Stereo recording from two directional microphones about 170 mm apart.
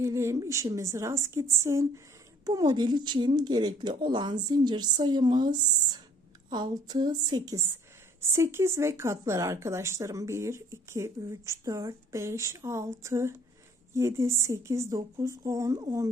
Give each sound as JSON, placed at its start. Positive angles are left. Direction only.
{"t": 0.0, "sound": "speech", "side_deg": -15}